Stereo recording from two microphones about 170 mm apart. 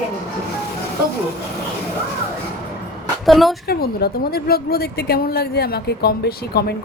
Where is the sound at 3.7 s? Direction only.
65° left (ahead or behind).